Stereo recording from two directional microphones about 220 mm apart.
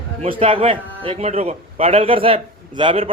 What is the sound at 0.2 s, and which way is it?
A man's voice, 25° right (ahead or behind).